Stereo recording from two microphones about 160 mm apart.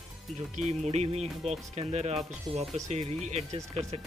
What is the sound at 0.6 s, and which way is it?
Speech, 45° right (ahead or behind).